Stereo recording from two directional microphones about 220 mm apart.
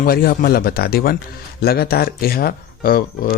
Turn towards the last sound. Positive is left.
turn(degrees=40)  # may be behind; listen again after turning